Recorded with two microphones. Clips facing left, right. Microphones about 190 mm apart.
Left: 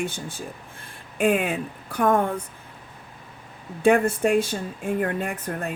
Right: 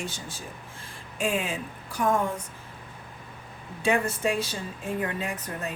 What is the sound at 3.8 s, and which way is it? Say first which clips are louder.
Speech: left 7 dB; 55° left (ahead or behind).